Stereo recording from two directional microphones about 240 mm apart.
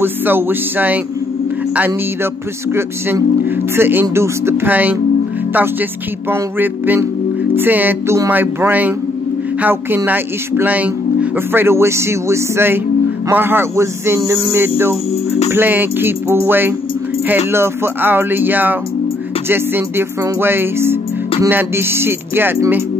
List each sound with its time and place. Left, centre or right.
0.0 s speech: centre
2.7 s speech: centre
6.3 s speech: centre